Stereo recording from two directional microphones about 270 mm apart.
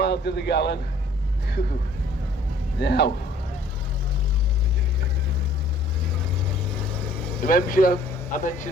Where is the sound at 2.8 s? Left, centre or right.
Left.